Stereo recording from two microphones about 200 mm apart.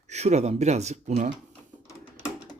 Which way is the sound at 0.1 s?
35° right (ahead or behind).